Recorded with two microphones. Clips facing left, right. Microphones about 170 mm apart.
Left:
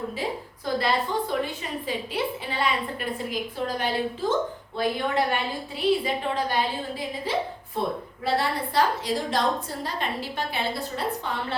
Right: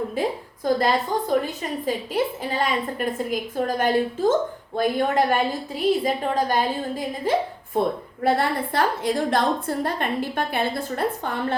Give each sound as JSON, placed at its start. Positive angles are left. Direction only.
{"t": 0.2, "sound": "a woman's voice", "side_deg": -50}